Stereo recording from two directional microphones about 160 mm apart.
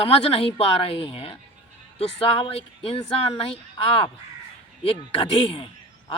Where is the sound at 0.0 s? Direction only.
35° left (ahead or behind).